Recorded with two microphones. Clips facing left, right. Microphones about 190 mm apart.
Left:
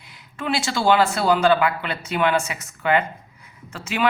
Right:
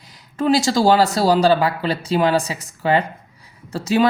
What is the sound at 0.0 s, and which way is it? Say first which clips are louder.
Speech: right 9 dB; 40° right (ahead or behind).